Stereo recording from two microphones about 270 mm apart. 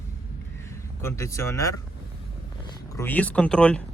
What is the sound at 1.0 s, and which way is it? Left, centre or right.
Speech, centre.